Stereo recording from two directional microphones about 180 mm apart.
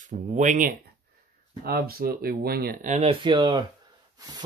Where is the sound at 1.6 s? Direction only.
55° right (ahead or behind).